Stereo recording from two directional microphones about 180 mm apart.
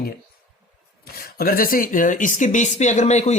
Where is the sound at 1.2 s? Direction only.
55° left (ahead or behind).